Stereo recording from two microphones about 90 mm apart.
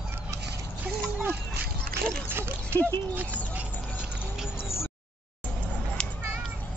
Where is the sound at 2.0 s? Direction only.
25° right (ahead or behind).